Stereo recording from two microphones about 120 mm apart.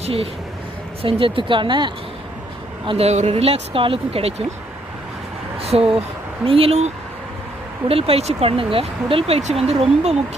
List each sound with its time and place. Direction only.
0.0 s speech: 50° right (ahead or behind)
3.1 s speech: 65° right (ahead or behind)
5.5 s speech: 55° right (ahead or behind)